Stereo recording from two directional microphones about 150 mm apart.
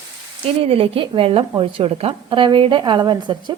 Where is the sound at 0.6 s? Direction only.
40° right (ahead or behind).